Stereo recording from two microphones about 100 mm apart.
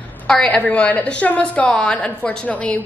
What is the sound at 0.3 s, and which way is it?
A woman's voice, 10° left (ahead or behind).